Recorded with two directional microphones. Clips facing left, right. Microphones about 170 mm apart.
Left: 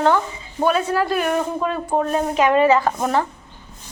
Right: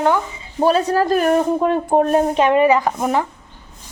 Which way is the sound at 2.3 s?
25° right (ahead or behind).